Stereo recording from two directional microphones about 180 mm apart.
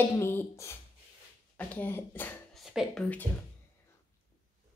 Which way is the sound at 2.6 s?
Centre (ahead or behind).